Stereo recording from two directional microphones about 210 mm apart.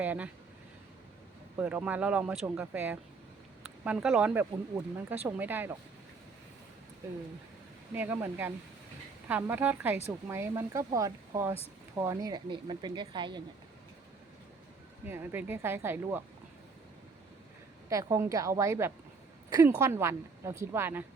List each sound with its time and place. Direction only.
0.0 s speech: 5° right (ahead or behind)
1.5 s speech: 5° right (ahead or behind)
7.9 s speech: 10° right (ahead or behind)
15.0 s speech: 10° right (ahead or behind)
17.8 s speech: 15° right (ahead or behind)